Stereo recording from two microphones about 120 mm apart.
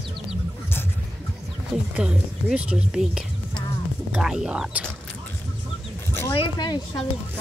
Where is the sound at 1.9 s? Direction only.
10° right (ahead or behind).